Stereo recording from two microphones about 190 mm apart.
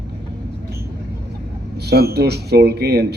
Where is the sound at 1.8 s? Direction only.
55° right (ahead or behind).